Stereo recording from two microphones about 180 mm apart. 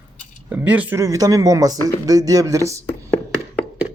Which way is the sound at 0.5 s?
10° right (ahead or behind).